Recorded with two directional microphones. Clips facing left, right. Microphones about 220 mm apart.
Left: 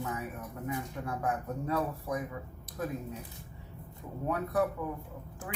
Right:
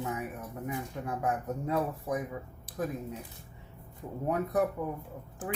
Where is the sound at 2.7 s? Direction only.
30° right (ahead or behind).